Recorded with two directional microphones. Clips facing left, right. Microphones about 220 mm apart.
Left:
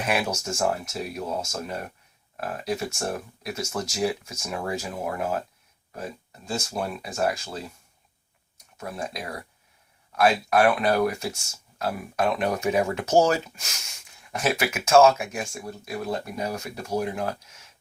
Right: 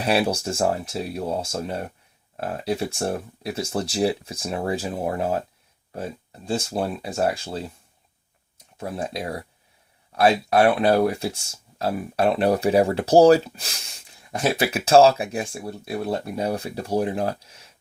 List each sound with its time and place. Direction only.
0.0 s speech: 35° right (ahead or behind)
8.8 s speech: 30° right (ahead or behind)